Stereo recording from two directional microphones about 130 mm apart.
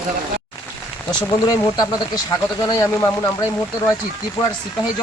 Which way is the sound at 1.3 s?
25° left (ahead or behind).